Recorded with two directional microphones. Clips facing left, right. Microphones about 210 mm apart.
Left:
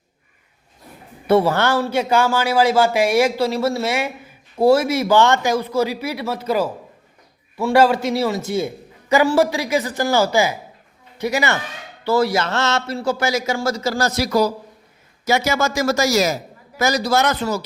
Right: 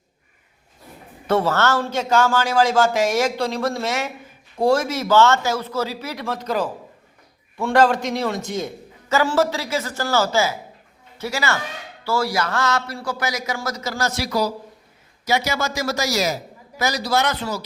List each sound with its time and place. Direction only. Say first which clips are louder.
1.3 s a man's voice: left 3 dB; 10° left (ahead or behind); by 17.6 s 45° left (ahead or behind)